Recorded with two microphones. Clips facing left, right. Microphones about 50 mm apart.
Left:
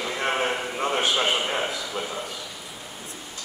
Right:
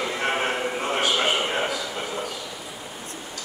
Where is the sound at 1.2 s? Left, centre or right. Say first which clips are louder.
Right 1 dB; centre.